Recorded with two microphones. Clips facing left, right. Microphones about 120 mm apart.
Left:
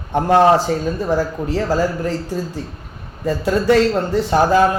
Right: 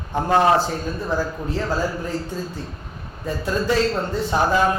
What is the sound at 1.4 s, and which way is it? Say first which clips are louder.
Speech: left 5 dB; 90° left.